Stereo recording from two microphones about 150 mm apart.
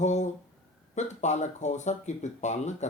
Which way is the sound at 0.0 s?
50° left (ahead or behind).